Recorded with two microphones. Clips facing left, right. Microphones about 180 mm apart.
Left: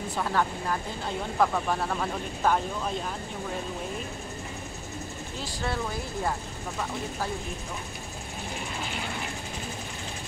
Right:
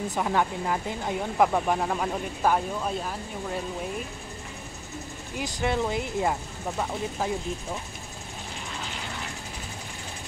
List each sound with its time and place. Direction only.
0.1 s speech: 15° right (ahead or behind)
5.4 s speech: 20° right (ahead or behind)